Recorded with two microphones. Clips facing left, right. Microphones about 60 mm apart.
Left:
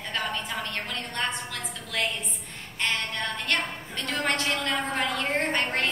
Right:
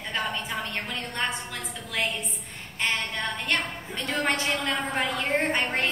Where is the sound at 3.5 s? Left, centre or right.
Centre.